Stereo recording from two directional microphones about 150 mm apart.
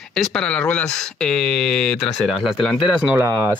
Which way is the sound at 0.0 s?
5° left (ahead or behind).